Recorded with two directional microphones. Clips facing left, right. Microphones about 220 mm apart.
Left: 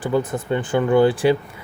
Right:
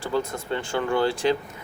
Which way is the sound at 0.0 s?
15° left (ahead or behind).